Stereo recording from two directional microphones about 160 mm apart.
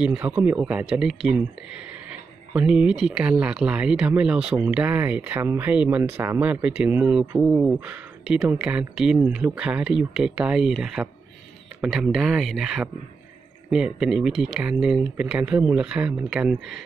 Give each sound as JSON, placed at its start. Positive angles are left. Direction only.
{"t": 0.0, "sound": "speech", "side_deg": -5}
{"t": 2.5, "sound": "speech", "side_deg": -5}